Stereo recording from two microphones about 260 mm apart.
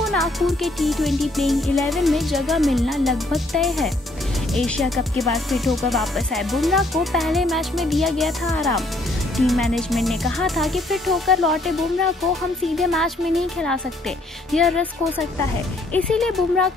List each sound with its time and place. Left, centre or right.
0.0 s music: centre
15.9 s music: centre